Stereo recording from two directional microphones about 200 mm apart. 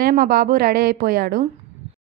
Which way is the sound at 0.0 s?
45° right (ahead or behind).